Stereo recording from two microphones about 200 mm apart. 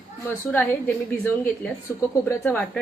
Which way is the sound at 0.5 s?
10° left (ahead or behind).